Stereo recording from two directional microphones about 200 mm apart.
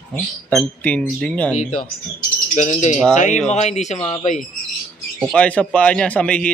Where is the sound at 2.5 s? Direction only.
35° left (ahead or behind).